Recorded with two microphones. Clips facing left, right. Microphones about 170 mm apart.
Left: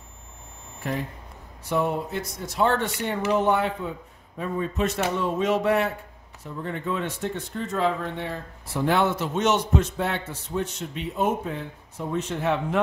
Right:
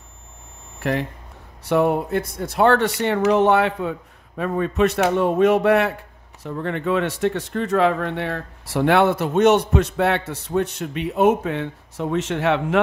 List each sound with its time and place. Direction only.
0.7 s speech: 75° right (ahead or behind)